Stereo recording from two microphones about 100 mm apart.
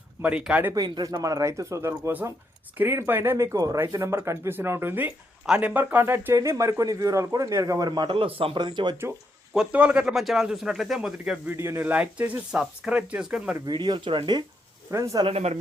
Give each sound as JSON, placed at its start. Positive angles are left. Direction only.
{"t": 0.2, "sound": "speech", "side_deg": -10}
{"t": 1.2, "sound": "speech", "side_deg": -35}
{"t": 8.1, "sound": "a man's voice", "side_deg": -70}
{"t": 8.5, "sound": "speech", "side_deg": -50}
{"t": 9.6, "sound": "speech", "side_deg": -10}
{"t": 11.4, "sound": "speech", "side_deg": -25}
{"t": 13.7, "sound": "speech", "side_deg": -50}
{"t": 14.8, "sound": "speech", "side_deg": -30}
{"t": 15.3, "sound": "speech", "side_deg": -90}